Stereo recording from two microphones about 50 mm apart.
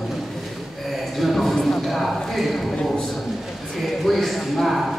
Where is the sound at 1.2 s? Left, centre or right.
Centre.